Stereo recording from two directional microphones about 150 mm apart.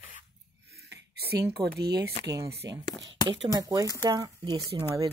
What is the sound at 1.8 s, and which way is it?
Speech, 90° right.